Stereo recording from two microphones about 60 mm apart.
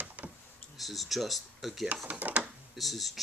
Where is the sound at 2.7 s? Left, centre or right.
Centre.